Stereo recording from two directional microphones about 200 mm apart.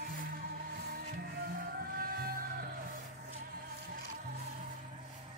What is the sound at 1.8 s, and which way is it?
Music, 50° right (ahead or behind).